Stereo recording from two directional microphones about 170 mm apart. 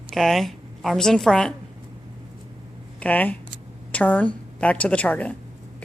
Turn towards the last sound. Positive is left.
turn(degrees=10)  # may be behind; listen again after turning